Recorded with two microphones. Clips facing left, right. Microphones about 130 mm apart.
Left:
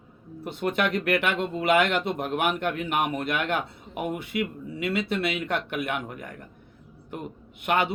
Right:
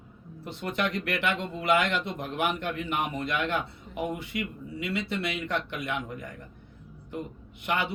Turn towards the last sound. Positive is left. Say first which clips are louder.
# left 5 dB
turn(degrees=60)  # may be behind; listen again after turning